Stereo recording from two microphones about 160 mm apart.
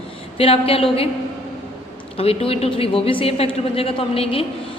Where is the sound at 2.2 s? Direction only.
35° left (ahead or behind).